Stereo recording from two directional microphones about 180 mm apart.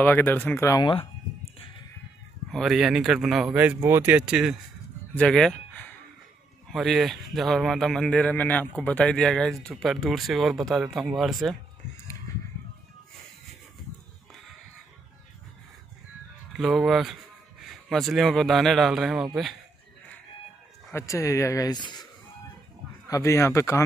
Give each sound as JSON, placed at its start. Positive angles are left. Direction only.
{"t": 0.0, "sound": "speech", "side_deg": 10}
{"t": 2.5, "sound": "speech", "side_deg": 0}
{"t": 16.5, "sound": "speech", "side_deg": 0}
{"t": 20.9, "sound": "speech", "side_deg": 15}
{"t": 23.0, "sound": "speech", "side_deg": 15}